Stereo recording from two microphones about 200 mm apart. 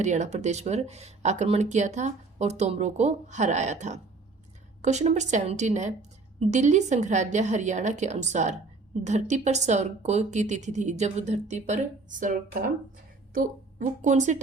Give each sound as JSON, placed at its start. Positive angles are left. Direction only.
{"t": 0.0, "sound": "a woman's voice", "side_deg": -35}